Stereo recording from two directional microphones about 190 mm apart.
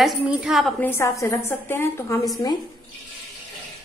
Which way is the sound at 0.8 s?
15° left (ahead or behind).